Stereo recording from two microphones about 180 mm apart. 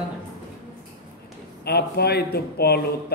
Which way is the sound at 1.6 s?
65° left (ahead or behind).